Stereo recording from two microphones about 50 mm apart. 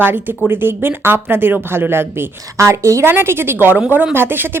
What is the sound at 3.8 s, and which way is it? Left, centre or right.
Speech, right.